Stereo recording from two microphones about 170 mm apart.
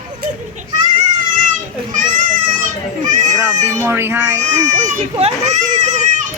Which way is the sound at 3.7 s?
15° right (ahead or behind).